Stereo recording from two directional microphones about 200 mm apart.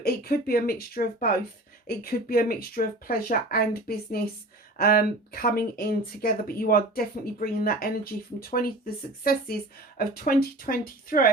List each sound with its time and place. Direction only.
0.0 s speech: 50° left (ahead or behind)